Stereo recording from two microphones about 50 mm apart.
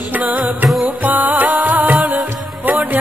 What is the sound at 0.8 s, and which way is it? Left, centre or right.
Music, right.